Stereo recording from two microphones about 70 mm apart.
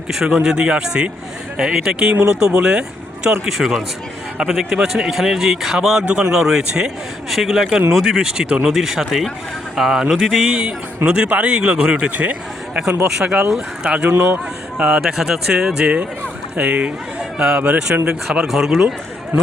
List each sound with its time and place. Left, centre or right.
0.1 s a man's voice: centre
18.4 s a man's voice: centre